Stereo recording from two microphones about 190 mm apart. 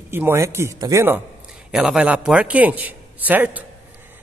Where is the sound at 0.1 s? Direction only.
10° right (ahead or behind).